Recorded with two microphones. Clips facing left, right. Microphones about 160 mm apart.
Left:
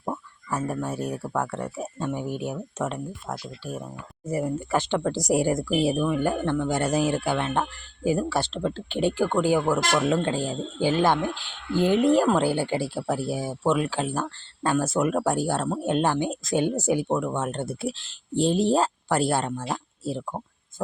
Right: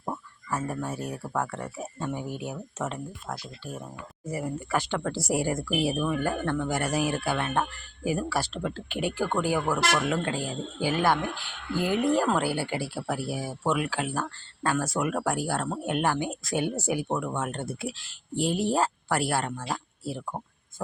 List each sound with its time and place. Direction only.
0.0 s a sound: 5° left (ahead or behind)
0.9 s a man's voice: 20° left (ahead or behind)
4.3 s a man's voice: 25° left (ahead or behind)